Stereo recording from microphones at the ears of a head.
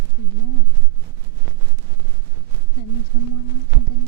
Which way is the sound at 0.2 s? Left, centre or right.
Left.